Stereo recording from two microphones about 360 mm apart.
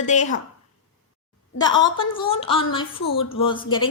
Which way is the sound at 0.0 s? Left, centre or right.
Centre.